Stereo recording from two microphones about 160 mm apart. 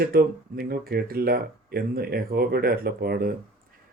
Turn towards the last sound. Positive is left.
turn(degrees=-75)  # may be behind; listen again after turning